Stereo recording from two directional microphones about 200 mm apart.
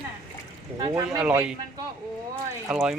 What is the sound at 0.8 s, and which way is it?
Speech, 20° right (ahead or behind).